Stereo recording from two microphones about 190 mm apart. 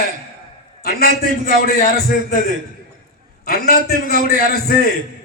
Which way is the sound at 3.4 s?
55° left (ahead or behind).